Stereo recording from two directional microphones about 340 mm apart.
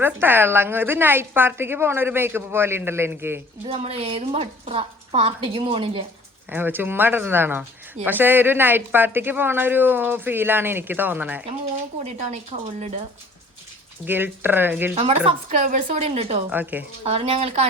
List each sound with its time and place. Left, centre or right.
0.0 s a woman's voice: centre
3.8 s a woman's voice: centre
6.5 s speech: centre
14.0 s speech: centre
14.9 s a woman's voice: centre
16.5 s speech: centre
17.0 s a woman's voice: centre